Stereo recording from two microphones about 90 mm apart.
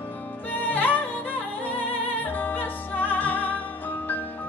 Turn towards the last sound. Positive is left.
turn(degrees=20)  # may be behind; listen again after turning